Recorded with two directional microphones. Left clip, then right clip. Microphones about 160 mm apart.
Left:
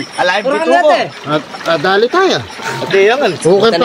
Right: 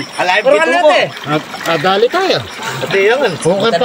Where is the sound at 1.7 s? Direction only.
30° left (ahead or behind).